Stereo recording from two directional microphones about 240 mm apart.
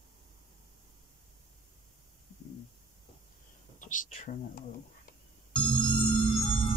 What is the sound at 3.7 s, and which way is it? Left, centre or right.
Speech, left.